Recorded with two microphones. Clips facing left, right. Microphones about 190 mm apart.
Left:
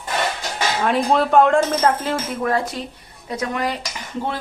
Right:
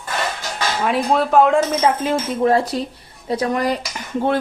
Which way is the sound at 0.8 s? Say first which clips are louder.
Even; centre (ahead or behind).